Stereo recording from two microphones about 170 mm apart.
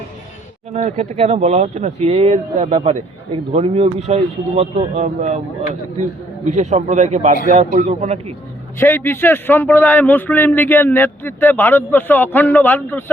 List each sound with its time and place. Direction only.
0.7 s a man's voice: 40° right (ahead or behind)
8.8 s a man's voice: 15° left (ahead or behind)